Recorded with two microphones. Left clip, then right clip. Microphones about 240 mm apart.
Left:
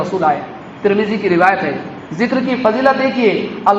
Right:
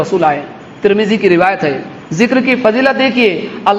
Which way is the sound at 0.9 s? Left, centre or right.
Right.